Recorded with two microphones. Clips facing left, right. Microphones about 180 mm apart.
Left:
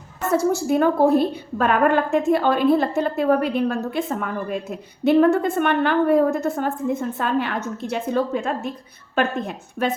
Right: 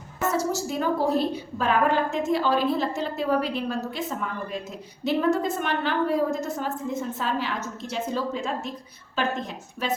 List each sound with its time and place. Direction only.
0.3 s a woman's voice: 55° left (ahead or behind)